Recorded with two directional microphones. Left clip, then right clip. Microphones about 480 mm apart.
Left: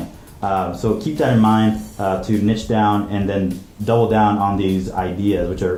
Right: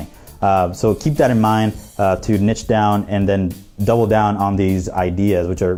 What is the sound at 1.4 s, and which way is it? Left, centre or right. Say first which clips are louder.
Speech: even; right.